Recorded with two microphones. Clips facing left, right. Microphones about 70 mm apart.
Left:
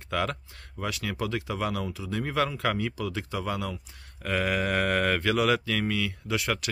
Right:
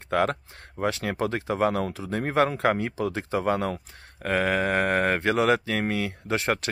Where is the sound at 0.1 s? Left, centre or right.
Right.